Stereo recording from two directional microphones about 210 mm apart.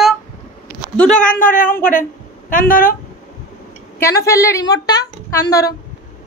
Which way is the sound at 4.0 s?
15° left (ahead or behind).